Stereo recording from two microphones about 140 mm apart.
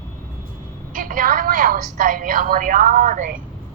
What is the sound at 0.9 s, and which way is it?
A woman's voice, 75° right (ahead or behind).